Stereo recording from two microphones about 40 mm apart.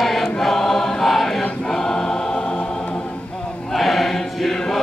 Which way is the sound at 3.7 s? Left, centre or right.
Centre.